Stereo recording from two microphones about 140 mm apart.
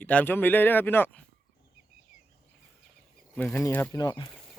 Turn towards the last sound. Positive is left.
turn(degrees=30)  # may be behind; listen again after turning